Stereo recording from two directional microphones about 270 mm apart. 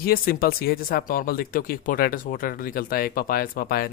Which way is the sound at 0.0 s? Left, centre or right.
Left.